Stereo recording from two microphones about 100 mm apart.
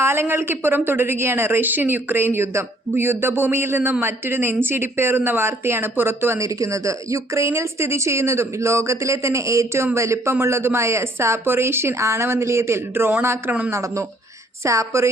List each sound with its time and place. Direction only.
0.0 s a woman's voice: 25° right (ahead or behind)